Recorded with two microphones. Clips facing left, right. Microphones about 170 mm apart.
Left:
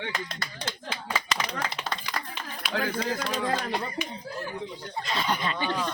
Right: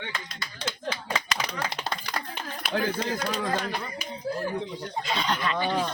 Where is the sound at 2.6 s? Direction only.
55° right (ahead or behind).